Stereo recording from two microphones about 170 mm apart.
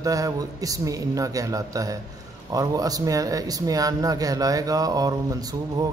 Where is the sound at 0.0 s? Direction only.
20° right (ahead or behind).